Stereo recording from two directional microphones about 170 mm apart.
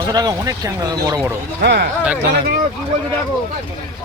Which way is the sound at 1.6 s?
85° right.